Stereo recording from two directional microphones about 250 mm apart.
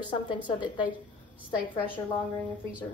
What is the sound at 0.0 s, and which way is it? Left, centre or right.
Speech, centre.